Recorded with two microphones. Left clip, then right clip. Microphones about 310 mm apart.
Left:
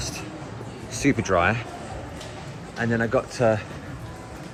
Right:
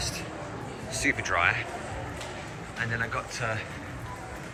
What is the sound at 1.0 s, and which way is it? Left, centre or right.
Speech, centre.